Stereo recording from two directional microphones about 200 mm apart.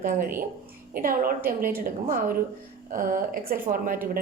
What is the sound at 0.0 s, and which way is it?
A woman's voice, 45° right (ahead or behind).